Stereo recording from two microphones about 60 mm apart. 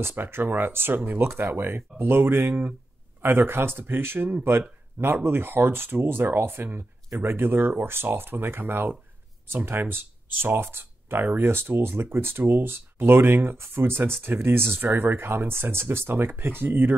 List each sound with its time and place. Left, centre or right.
0.0 s speech: right